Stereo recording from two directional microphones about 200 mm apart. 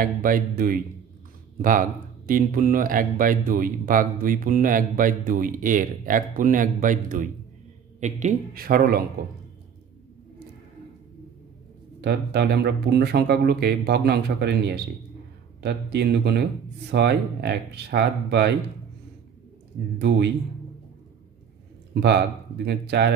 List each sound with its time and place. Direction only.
0.0 s speech: 45° right (ahead or behind)
12.0 s speech: 55° right (ahead or behind)
20.0 s speech: 55° right (ahead or behind)
22.7 s speech: 55° right (ahead or behind)